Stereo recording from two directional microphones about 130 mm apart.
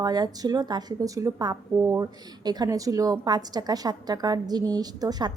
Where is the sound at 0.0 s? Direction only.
30° right (ahead or behind).